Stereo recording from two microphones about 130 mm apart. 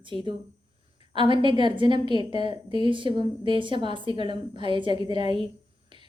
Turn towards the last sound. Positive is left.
turn(degrees=-35)  # may be behind; listen again after turning